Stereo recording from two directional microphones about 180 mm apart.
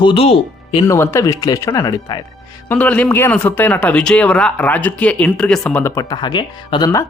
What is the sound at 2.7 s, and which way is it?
Speech, 10° left (ahead or behind).